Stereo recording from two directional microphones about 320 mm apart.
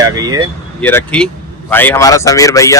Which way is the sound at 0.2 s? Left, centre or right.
Centre.